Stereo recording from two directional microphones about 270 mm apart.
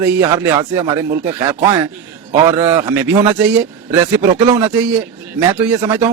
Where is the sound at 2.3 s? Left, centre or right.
Centre.